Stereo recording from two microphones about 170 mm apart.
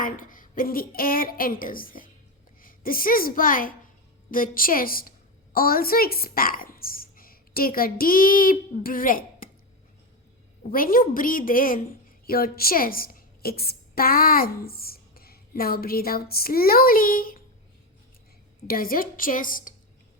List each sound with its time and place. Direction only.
0.0 s a woman's voice: 55° left (ahead or behind)
10.7 s a woman's voice: 55° left (ahead or behind)
18.7 s a woman's voice: 60° left (ahead or behind)